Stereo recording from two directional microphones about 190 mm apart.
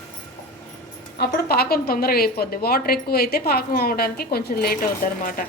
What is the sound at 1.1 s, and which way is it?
A woman's voice, 55° left (ahead or behind).